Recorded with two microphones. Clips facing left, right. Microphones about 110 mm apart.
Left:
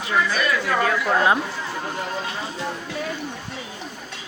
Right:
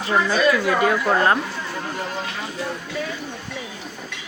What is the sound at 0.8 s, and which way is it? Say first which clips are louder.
Speech: right 2 dB; 5° right (ahead or behind).